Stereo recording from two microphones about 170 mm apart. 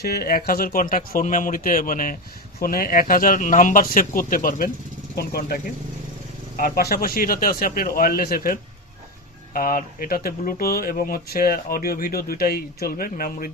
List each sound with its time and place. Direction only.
0.0 s speech: 65° left (ahead or behind)
6.6 s speech: 60° left (ahead or behind)